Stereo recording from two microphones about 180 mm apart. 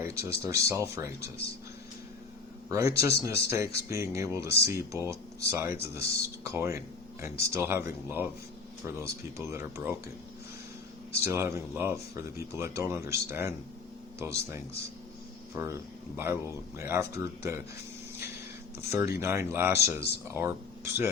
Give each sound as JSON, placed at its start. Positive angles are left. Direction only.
{"t": 0.0, "sound": "a sound", "side_deg": -15}
{"t": 0.4, "sound": "speech", "side_deg": -15}
{"t": 2.6, "sound": "speech", "side_deg": -15}
{"t": 11.2, "sound": "speech", "side_deg": -15}
{"t": 18.8, "sound": "speech", "side_deg": -15}